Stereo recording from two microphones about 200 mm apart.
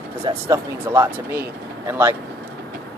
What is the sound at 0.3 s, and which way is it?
Speech, 15° right (ahead or behind).